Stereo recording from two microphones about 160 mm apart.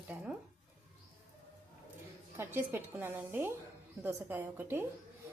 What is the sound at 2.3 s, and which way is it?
A woman's voice, 15° right (ahead or behind).